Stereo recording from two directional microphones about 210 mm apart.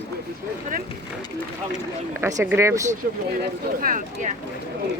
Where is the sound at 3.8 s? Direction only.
40° right (ahead or behind).